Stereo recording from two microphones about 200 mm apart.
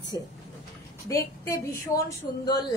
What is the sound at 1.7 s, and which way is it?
Speech, 15° left (ahead or behind).